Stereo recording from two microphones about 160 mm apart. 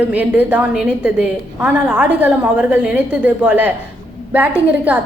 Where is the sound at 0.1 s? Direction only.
10° right (ahead or behind).